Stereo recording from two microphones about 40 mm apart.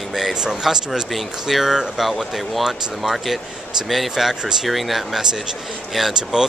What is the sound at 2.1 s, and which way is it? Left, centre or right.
Speech, centre.